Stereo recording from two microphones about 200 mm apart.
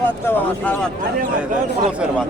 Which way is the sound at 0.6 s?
10° left (ahead or behind).